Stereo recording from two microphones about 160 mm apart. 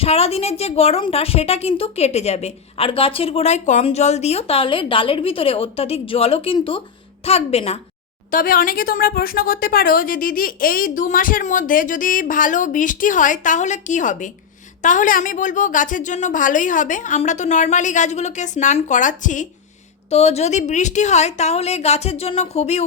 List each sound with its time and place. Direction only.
0.0 s a woman's voice: 40° left (ahead or behind)
8.3 s a woman's voice: 60° left (ahead or behind)
20.1 s a woman's voice: 40° left (ahead or behind)